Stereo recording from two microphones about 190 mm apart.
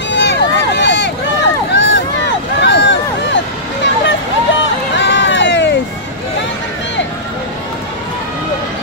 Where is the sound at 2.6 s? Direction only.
65° left (ahead or behind).